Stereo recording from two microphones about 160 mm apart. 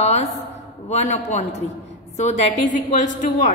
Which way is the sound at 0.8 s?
45° left (ahead or behind).